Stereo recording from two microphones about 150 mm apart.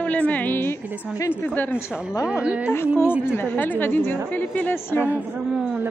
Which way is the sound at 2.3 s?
5° right (ahead or behind).